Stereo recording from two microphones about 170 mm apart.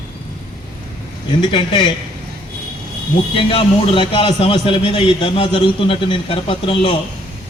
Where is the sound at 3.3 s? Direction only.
30° left (ahead or behind).